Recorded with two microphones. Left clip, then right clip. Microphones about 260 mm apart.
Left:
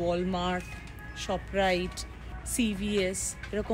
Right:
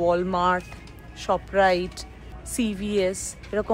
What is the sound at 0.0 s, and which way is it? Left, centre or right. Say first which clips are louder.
Speech: right 8 dB; centre.